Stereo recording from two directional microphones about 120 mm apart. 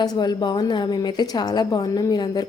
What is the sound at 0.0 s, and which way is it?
A woman's voice, 35° left (ahead or behind).